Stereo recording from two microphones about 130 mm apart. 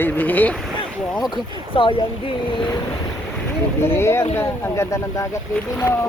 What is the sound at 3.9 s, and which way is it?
Speech, 20° left (ahead or behind).